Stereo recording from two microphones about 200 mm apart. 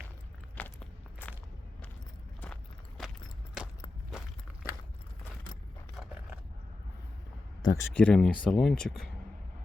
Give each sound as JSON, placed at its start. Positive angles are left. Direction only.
{"t": 0.6, "sound": "walk", "side_deg": 5}
{"t": 7.6, "sound": "speech", "side_deg": 15}
{"t": 7.9, "sound": "speech", "side_deg": 5}